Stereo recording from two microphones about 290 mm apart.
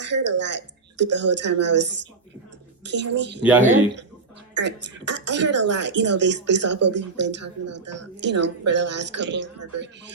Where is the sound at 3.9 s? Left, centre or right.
Right.